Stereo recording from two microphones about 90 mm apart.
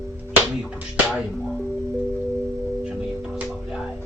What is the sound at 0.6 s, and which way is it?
Speech, 10° right (ahead or behind).